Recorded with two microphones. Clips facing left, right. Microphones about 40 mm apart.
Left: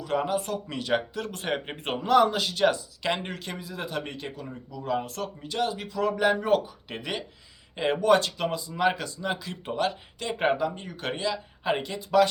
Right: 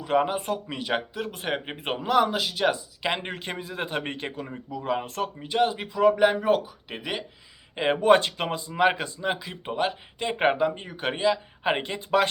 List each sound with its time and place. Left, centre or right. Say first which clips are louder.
0.0 s speech: right 3 dB; right; by 7.3 s centre
7.8 s speech: right 2 dB; right